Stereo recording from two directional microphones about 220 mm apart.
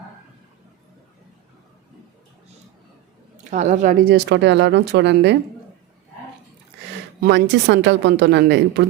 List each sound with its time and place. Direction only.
3.3 s speech: 35° right (ahead or behind); by 5.4 s 50° right (ahead or behind)
7.2 s speech: 50° right (ahead or behind)